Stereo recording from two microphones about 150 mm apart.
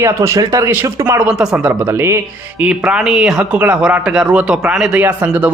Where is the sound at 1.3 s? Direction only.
5° right (ahead or behind).